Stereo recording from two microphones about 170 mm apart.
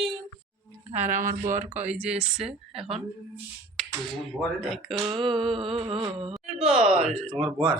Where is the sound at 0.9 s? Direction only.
45° right (ahead or behind).